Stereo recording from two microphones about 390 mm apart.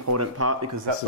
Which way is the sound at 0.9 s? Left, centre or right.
Right.